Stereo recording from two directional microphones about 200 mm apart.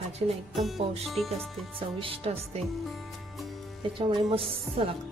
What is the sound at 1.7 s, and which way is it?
Speech, 25° right (ahead or behind).